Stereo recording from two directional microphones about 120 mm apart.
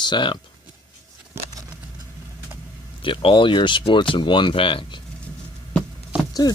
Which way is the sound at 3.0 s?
45° left (ahead or behind).